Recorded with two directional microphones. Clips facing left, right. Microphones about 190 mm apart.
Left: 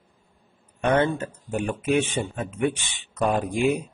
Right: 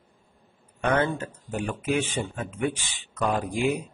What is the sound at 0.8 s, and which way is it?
Speech, 30° left (ahead or behind).